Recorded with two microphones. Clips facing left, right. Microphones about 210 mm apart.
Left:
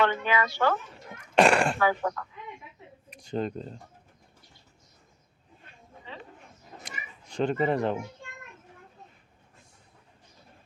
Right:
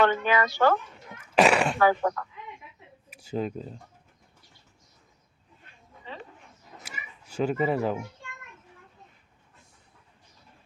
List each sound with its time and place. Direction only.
0.0 s speech: 45° right (ahead or behind)
1.4 s speech: 5° right (ahead or behind)
1.8 s speech: 45° right (ahead or behind)
3.1 s speech: 5° right (ahead or behind)
6.8 s a sound: 5° right (ahead or behind)